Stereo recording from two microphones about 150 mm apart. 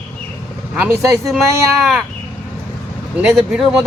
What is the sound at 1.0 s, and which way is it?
Speech, 20° right (ahead or behind).